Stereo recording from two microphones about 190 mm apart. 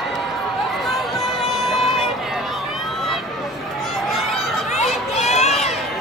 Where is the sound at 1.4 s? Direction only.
Centre (ahead or behind).